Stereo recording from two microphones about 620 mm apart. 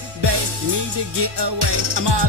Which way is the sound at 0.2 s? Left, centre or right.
Right.